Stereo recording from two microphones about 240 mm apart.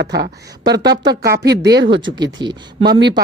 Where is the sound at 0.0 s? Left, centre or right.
Right.